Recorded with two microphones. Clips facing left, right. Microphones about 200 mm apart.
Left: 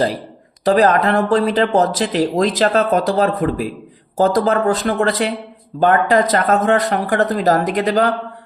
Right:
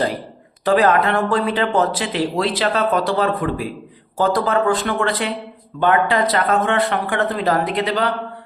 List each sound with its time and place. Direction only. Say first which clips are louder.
0.6 s speech: left 2 dB; 40° left (ahead or behind)